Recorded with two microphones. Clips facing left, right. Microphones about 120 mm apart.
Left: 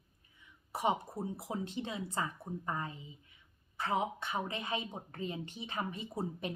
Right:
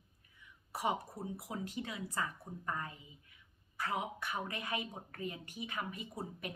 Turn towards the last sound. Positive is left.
turn(degrees=25)  # may be behind; listen again after turning